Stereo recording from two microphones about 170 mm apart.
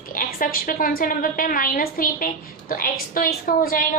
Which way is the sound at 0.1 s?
55° left (ahead or behind).